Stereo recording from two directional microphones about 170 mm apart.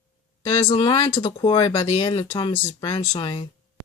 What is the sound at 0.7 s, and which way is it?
Speech, 30° left (ahead or behind).